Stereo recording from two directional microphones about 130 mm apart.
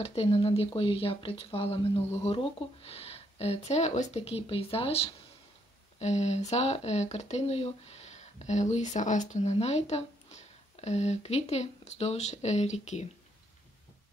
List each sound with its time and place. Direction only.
0.0 s speech: 50° left (ahead or behind)